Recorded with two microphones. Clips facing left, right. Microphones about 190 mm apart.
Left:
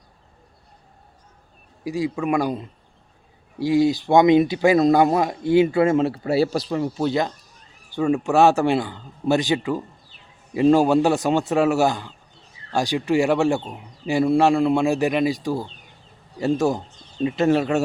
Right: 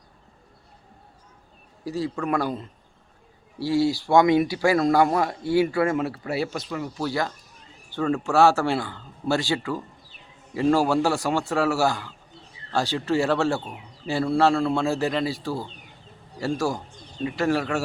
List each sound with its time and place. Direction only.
1.8 s speech: 15° left (ahead or behind)